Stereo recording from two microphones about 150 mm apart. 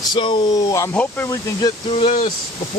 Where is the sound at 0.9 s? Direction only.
10° left (ahead or behind).